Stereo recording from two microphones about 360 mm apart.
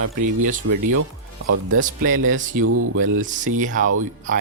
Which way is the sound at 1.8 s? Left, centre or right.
Right.